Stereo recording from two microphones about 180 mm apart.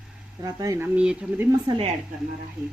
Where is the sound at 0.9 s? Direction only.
5° right (ahead or behind).